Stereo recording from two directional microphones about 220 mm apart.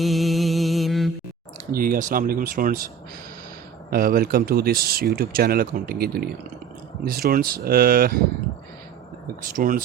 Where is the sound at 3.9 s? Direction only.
45° right (ahead or behind).